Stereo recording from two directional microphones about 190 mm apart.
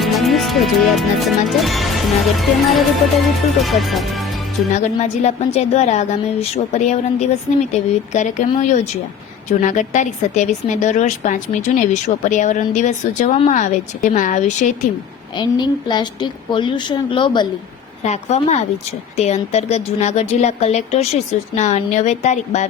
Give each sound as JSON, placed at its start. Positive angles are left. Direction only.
{"t": 0.0, "sound": "speech", "side_deg": 0}
{"t": 4.7, "sound": "a woman's voice", "side_deg": 35}
{"t": 15.4, "sound": "a woman's voice", "side_deg": 20}
{"t": 18.0, "sound": "a woman's voice", "side_deg": 35}